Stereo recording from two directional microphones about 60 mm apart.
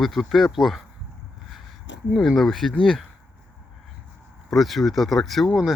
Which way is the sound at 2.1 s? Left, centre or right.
Centre.